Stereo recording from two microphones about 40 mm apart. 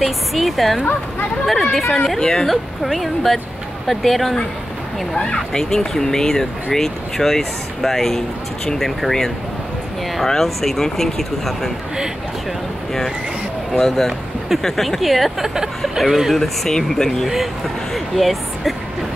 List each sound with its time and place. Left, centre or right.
0.0 s speech: centre
2.1 s speech: centre
2.4 s speech: centre
5.1 s speech: centre
13.7 s speech: centre
16.3 s speech: centre
17.9 s speech: centre